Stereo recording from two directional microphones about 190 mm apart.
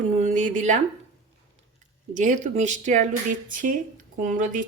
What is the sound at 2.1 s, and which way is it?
Speech, 40° right (ahead or behind).